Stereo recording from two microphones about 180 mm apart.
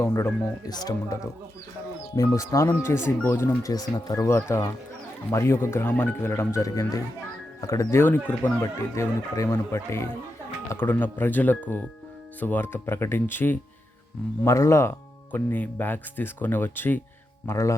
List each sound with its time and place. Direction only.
0.0 s speech: 15° left (ahead or behind)